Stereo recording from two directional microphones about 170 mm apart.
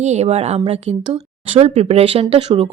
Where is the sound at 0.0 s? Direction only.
40° right (ahead or behind).